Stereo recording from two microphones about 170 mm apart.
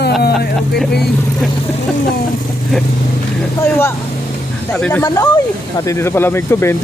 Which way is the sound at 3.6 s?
15° left (ahead or behind).